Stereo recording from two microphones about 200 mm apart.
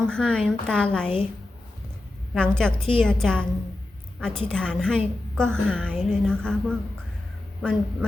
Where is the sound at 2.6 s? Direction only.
5° left (ahead or behind).